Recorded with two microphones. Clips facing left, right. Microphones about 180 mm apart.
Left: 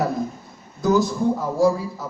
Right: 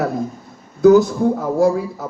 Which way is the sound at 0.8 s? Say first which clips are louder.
Right 9 dB; 65° right (ahead or behind).